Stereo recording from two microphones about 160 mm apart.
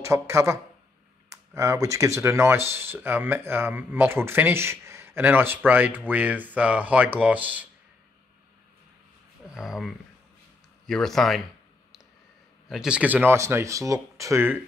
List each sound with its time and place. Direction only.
0.0 s speech: 20° right (ahead or behind)
9.5 s speech: centre (ahead or behind)
12.6 s speech: 5° right (ahead or behind)